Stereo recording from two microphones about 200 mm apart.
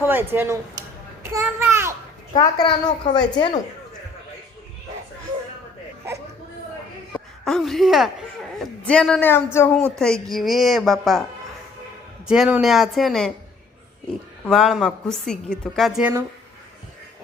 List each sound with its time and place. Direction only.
0.0 s a sound: 10° right (ahead or behind)
0.3 s a child's voice: 15° right (ahead or behind)
2.3 s a woman's voice: 20° left (ahead or behind)
7.1 s speech: centre (ahead or behind)
10.0 s a woman's voice: centre (ahead or behind)
12.3 s a woman's voice: 5° right (ahead or behind)
14.4 s a woman's voice: centre (ahead or behind)